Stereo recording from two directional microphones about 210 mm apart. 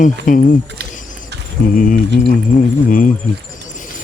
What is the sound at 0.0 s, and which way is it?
Speech, 40° left (ahead or behind).